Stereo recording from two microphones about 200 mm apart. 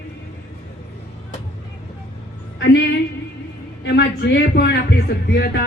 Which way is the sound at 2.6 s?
60° left (ahead or behind).